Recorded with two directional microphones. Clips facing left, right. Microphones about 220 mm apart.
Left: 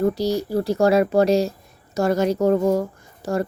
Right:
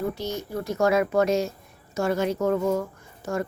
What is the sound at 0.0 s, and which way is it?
Speech, 35° left (ahead or behind).